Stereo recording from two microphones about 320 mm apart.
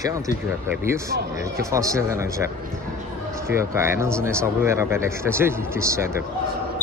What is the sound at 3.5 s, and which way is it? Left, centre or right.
Speech, centre.